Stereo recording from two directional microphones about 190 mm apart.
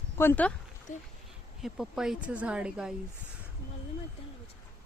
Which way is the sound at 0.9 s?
40° left (ahead or behind).